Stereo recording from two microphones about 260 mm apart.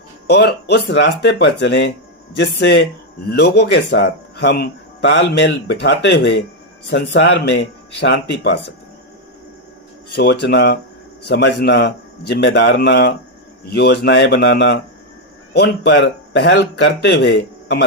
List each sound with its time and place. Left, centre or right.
0.3 s speech: left
10.2 s speech: left